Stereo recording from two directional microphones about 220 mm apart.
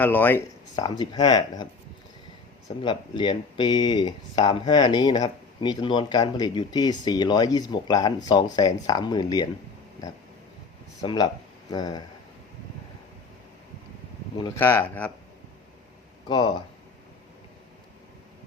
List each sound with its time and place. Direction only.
0.0 s speech: 10° left (ahead or behind)
2.8 s speech: 20° left (ahead or behind)
11.0 s speech: 20° left (ahead or behind)
14.6 s speech: 10° left (ahead or behind)
16.3 s speech: 20° left (ahead or behind)